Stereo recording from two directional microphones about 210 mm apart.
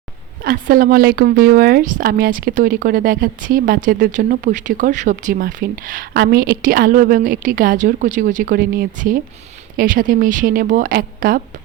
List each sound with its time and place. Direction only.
0.4 s speech: 40° right (ahead or behind)